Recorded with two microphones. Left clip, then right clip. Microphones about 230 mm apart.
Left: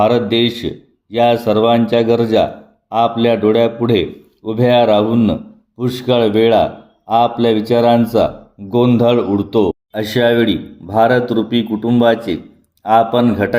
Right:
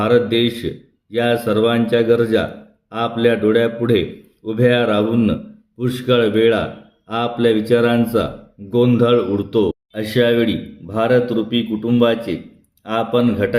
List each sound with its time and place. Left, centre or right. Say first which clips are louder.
0.0 s speech: left 2 dB; centre